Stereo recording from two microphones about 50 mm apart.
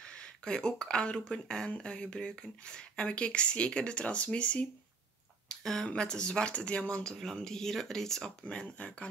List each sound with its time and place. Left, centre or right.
0.0 s speech: centre
5.5 s speech: centre
5.9 s speech: centre
7.4 s speech: centre
8.5 s speech: left